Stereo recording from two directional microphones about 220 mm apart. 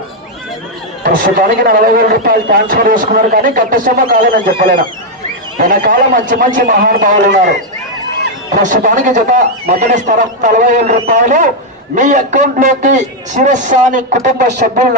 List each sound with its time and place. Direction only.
1.0 s a man's voice: 40° right (ahead or behind)
8.6 s a man's voice: 35° right (ahead or behind)